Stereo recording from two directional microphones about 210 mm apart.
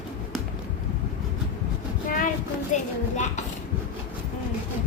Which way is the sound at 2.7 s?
35° left (ahead or behind).